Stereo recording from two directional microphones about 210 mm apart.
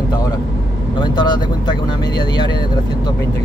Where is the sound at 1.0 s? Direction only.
20° left (ahead or behind).